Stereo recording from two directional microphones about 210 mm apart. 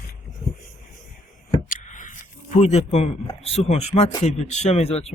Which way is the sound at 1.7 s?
35° left (ahead or behind).